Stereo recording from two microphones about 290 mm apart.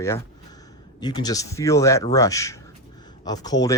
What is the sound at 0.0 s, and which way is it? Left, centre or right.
Speech, centre.